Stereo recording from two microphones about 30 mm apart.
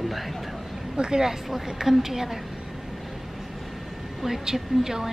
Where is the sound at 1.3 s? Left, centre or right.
Centre.